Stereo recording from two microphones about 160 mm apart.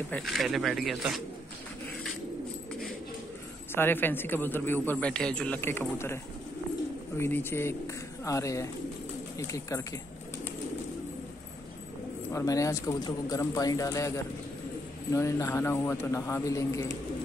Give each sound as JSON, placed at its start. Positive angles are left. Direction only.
{"t": 0.1, "sound": "speech", "side_deg": 0}
{"t": 3.7, "sound": "a man's voice", "side_deg": 15}
{"t": 7.2, "sound": "a man's voice", "side_deg": 15}
{"t": 12.3, "sound": "a man's voice", "side_deg": 20}